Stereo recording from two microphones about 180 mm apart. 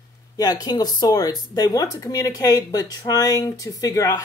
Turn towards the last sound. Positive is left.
turn(degrees=20)  # may be behind; listen again after turning